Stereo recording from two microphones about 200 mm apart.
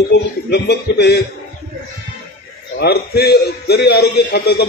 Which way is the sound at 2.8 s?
55° left (ahead or behind).